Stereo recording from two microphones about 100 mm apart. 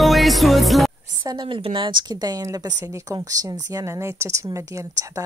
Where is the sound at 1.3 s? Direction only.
55° right (ahead or behind).